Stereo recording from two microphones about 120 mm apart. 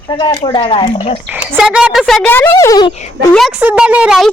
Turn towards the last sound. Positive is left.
turn(degrees=-10)  # may be behind; listen again after turning